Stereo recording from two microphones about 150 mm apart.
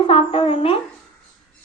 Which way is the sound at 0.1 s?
40° left (ahead or behind).